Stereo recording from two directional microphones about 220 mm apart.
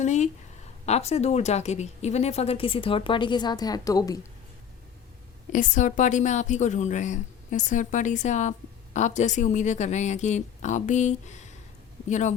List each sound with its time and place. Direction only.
0.0 s a sound: 30° left (ahead or behind)
0.9 s a woman's voice: 30° left (ahead or behind)
5.5 s a woman's voice: 35° left (ahead or behind)